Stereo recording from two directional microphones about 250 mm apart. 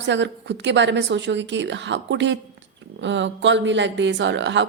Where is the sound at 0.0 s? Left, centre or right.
Right.